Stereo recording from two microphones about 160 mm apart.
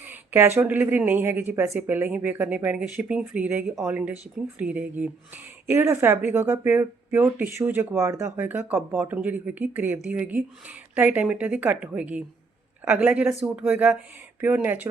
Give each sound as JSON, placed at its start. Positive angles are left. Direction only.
{"t": 0.0, "sound": "speech", "side_deg": -10}